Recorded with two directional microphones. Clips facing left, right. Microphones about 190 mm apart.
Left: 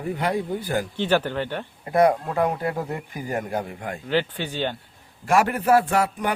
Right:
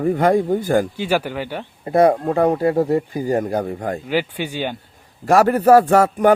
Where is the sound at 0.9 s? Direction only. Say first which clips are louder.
Right 1 dB; 10° right (ahead or behind).